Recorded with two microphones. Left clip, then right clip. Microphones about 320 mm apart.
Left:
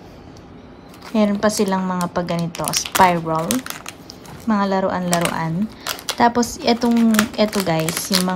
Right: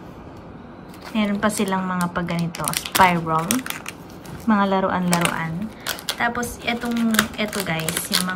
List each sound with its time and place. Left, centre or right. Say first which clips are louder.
1.1 s a woman's voice: left 5 dB; centre